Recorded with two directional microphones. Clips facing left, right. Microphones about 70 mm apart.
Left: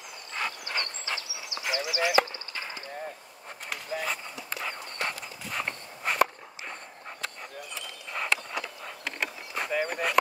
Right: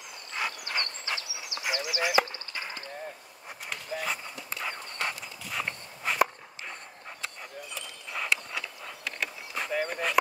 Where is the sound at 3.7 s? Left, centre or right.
Centre.